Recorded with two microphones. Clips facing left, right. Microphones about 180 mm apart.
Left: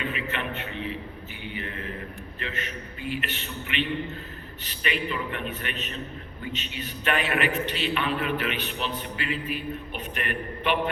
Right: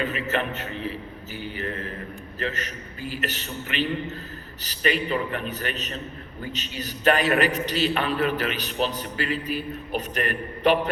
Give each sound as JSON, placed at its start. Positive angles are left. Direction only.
{"t": 0.0, "sound": "a man's voice", "side_deg": -40}